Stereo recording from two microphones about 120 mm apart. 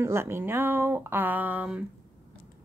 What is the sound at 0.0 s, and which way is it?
Speech, 20° right (ahead or behind).